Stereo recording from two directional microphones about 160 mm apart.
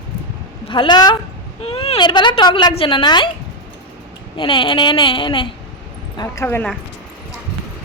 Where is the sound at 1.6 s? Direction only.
40° left (ahead or behind).